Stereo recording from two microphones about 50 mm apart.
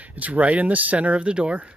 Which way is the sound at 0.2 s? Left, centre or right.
Right.